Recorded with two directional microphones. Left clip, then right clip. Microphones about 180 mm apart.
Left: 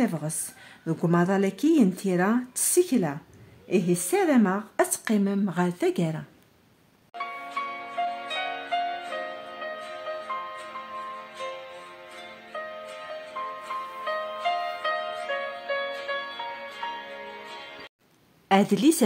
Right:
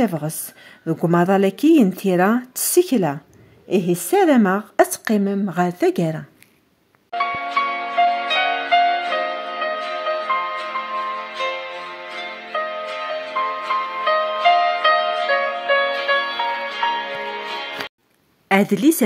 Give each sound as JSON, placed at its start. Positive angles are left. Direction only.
{"t": 0.0, "sound": "a woman's voice", "side_deg": -25}
{"t": 7.2, "sound": "music", "side_deg": -45}
{"t": 18.5, "sound": "a woman's voice", "side_deg": -10}